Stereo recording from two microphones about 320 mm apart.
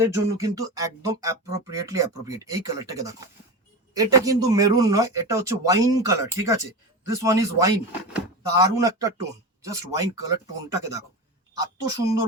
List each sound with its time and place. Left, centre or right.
0.0 s speech: centre